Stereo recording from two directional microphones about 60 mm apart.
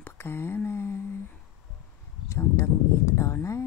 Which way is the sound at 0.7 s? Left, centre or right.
Left.